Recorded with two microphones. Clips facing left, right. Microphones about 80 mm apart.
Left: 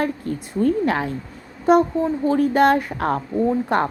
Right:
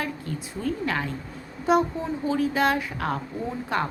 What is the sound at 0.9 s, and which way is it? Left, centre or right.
Speech, left.